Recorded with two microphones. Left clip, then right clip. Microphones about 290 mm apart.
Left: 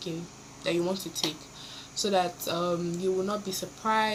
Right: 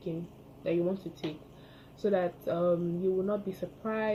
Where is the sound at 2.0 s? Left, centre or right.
Left.